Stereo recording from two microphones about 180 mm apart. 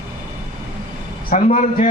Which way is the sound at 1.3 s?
40° left (ahead or behind).